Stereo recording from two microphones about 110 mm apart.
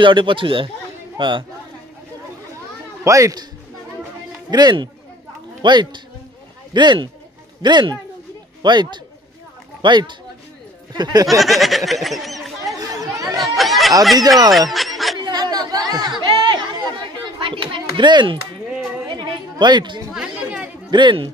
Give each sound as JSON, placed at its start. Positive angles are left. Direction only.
{"t": 0.0, "sound": "a man's voice", "side_deg": -50}
{"t": 3.0, "sound": "a child's voice", "side_deg": -30}
{"t": 4.5, "sound": "a man's voice", "side_deg": -40}
{"t": 11.2, "sound": "speech", "side_deg": 0}
{"t": 12.7, "sound": "chatter", "side_deg": -35}
{"t": 13.4, "sound": "chatter", "side_deg": 0}
{"t": 14.7, "sound": "music", "side_deg": 0}
{"t": 15.1, "sound": "chatter", "side_deg": -40}
{"t": 17.4, "sound": "a sound", "side_deg": -50}
{"t": 18.7, "sound": "a sound", "side_deg": -10}
{"t": 19.1, "sound": "a sound", "side_deg": -45}
{"t": 20.1, "sound": "chatter", "side_deg": -10}
{"t": 20.9, "sound": "speech", "side_deg": -45}